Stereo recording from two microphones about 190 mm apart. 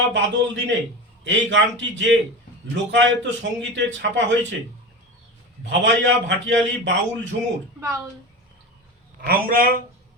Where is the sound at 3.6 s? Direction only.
70° right (ahead or behind).